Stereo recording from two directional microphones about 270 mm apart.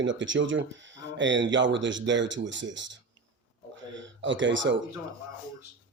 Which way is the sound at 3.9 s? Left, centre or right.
Right.